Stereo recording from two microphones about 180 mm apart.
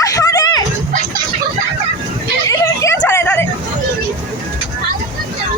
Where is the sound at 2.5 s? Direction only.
15° left (ahead or behind).